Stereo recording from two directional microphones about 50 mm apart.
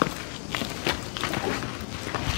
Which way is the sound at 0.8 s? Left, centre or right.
Centre.